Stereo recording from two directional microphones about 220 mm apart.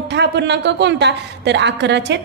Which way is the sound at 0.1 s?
50° right (ahead or behind).